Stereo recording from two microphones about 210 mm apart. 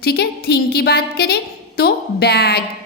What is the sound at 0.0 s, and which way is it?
A woman's voice, 50° left (ahead or behind).